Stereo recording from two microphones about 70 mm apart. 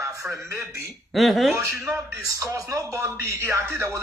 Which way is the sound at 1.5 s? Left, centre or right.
Right.